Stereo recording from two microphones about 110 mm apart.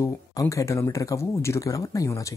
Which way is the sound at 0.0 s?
30° left (ahead or behind).